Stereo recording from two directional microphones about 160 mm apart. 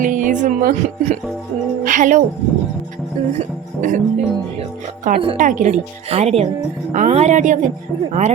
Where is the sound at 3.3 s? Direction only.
50° right (ahead or behind).